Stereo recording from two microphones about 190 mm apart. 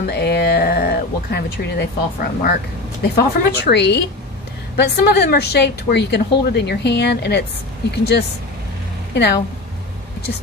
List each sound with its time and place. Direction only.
0.0 s a woman's voice: 60° left (ahead or behind)